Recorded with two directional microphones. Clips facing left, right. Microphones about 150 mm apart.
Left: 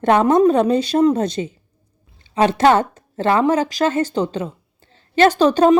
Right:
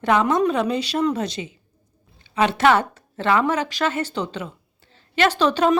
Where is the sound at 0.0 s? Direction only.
50° left (ahead or behind).